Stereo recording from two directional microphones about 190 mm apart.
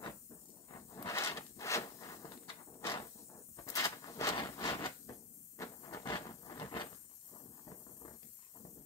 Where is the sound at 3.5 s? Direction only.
15° left (ahead or behind).